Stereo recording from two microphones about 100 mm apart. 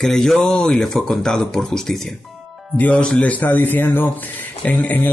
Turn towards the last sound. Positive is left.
turn(degrees=15)  # may be behind; listen again after turning